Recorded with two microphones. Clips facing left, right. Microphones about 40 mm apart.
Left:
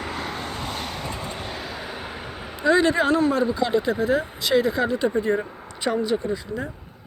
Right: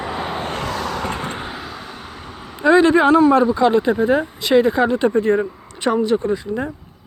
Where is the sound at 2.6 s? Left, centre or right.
Right.